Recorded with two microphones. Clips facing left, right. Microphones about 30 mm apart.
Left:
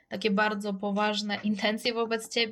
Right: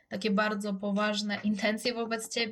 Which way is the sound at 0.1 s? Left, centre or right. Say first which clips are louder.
Left 2 dB; centre.